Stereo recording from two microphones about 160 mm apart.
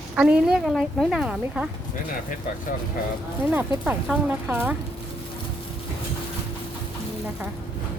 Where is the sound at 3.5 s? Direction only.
10° right (ahead or behind).